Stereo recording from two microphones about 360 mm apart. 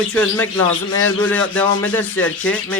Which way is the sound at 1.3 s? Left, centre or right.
Centre.